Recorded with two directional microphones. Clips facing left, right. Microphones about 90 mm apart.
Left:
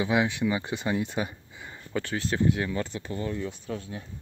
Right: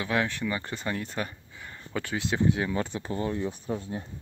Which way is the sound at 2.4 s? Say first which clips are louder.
Right 1 dB; 20° right (ahead or behind).